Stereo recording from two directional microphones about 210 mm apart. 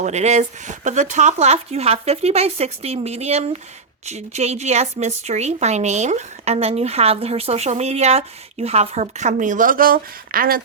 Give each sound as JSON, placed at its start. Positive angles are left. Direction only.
{"t": 0.0, "sound": "speech", "side_deg": -30}